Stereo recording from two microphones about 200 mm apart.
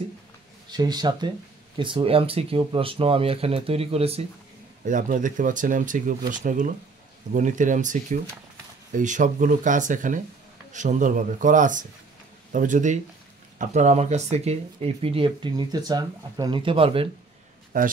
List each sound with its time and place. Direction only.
0.7 s speech: 20° right (ahead or behind)
17.7 s speech: 40° right (ahead or behind)